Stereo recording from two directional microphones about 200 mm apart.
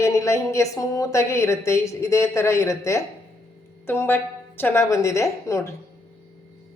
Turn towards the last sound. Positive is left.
turn(degrees=15)  # may be behind; listen again after turning